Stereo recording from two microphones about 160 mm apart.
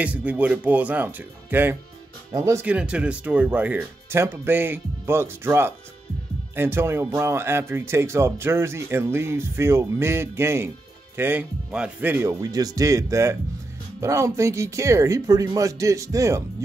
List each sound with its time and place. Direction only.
0.0 s speech: 10° right (ahead or behind)